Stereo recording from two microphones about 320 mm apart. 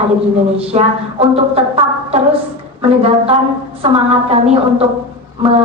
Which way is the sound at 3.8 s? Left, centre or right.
Centre.